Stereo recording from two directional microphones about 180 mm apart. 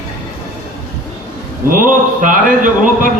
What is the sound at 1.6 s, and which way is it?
A man's voice, 50° right (ahead or behind).